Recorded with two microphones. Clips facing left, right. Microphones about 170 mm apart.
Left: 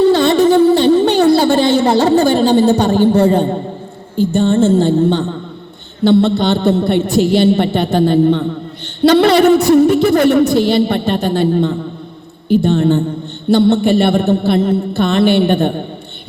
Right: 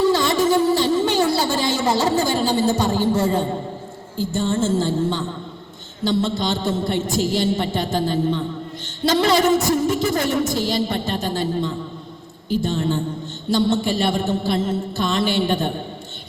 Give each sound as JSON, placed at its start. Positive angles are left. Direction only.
{"t": 0.0, "sound": "music", "side_deg": 65}
{"t": 4.2, "sound": "a woman's voice", "side_deg": 65}